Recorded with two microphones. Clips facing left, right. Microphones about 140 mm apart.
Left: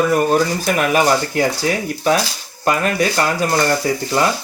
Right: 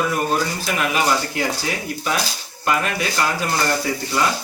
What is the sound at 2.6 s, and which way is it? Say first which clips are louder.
Speech: left 5 dB; 40° left (ahead or behind).